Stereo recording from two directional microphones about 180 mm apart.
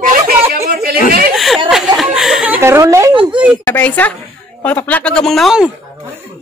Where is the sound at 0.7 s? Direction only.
60° right (ahead or behind).